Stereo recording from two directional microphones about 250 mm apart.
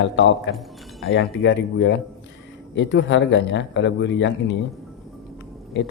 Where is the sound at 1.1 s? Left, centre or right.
Left.